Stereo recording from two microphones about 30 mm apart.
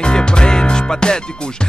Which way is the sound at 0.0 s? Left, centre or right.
Left.